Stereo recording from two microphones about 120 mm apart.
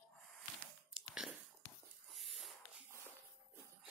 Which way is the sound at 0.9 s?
5° right (ahead or behind).